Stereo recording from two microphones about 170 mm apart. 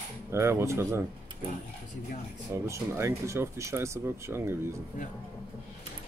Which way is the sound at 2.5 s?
15° right (ahead or behind).